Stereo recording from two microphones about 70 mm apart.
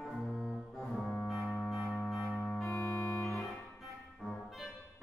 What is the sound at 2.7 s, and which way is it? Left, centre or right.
Organ, left.